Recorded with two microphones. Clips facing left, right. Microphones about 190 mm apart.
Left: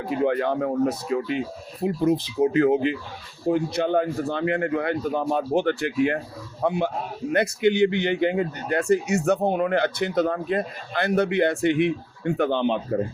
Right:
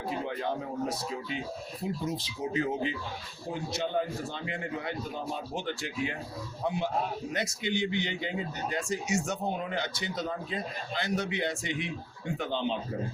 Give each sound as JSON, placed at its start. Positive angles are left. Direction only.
{"t": 0.2, "sound": "speech", "side_deg": 65}